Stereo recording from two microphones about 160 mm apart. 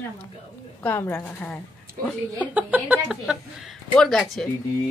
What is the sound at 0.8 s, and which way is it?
Speech, 10° left (ahead or behind).